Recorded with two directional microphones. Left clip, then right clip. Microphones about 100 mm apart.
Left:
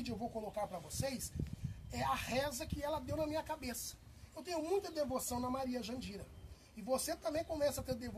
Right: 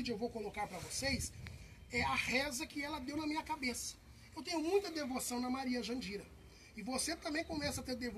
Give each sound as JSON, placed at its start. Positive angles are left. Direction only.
{"t": 0.0, "sound": "a man's voice", "side_deg": 50}